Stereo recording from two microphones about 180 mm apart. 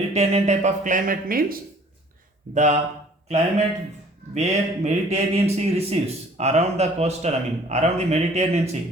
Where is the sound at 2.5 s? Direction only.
40° right (ahead or behind).